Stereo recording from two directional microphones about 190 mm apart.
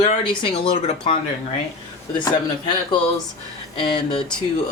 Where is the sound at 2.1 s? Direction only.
25° left (ahead or behind).